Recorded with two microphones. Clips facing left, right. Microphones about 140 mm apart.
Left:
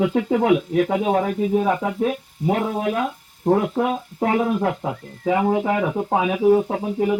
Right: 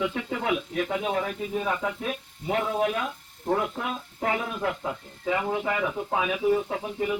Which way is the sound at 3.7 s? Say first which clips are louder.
Left 11 dB; 65° left (ahead or behind).